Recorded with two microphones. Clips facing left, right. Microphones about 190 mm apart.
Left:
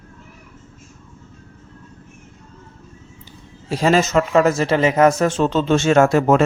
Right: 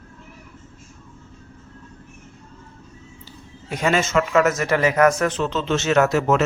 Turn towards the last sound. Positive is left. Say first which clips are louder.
# left 4 dB
turn(degrees=30)  # may be behind; listen again after turning